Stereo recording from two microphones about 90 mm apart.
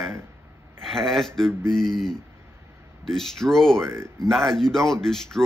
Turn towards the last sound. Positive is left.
turn(degrees=5)  # may be behind; listen again after turning